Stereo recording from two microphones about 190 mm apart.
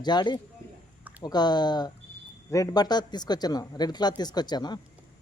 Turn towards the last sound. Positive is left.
turn(degrees=20)  # may be behind; listen again after turning